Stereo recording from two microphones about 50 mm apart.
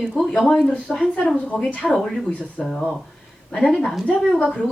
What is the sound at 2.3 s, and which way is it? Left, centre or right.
Speech, left.